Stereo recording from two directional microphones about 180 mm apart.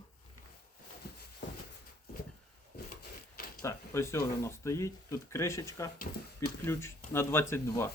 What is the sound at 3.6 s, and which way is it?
Speech, 15° left (ahead or behind).